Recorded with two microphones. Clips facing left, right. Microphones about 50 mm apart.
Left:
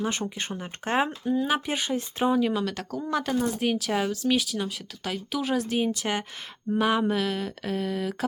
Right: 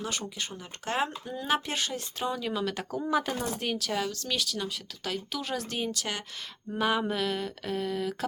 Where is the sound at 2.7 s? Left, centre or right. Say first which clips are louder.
Even; centre.